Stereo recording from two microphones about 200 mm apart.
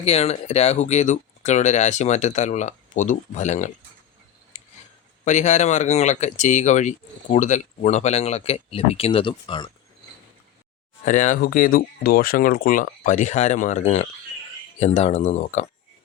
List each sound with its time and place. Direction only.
0.0 s speech: 30° left (ahead or behind)
4.5 s scissors: 35° left (ahead or behind)
5.2 s speech: 35° left (ahead or behind)
11.0 s speech: 40° left (ahead or behind)